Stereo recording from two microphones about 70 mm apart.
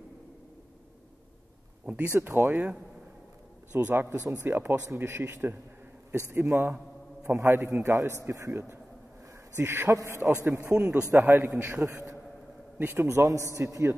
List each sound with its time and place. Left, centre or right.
2.0 s speech: right
2.5 s a man's voice: centre
3.7 s a man's voice: right
4.1 s a man's voice: right
4.5 s speech: right
8.3 s a man's voice: right
9.9 s a man's voice: right
10.6 s a man's voice: centre
11.1 s a man's voice: right
11.7 s speech: right
13.0 s a man's voice: right